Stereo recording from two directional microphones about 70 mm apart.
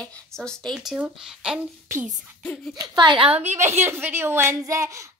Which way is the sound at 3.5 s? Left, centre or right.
Right.